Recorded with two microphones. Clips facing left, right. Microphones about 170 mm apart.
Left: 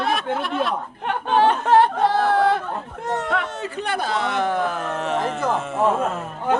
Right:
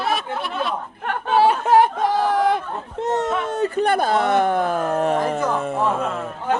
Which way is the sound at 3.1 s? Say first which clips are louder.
Right 2 dB; 45° right (ahead or behind).